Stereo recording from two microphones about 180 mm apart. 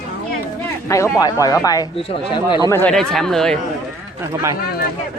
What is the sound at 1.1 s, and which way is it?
Speech, 20° left (ahead or behind).